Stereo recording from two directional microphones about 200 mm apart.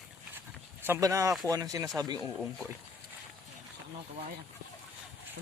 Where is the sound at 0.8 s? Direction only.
15° right (ahead or behind).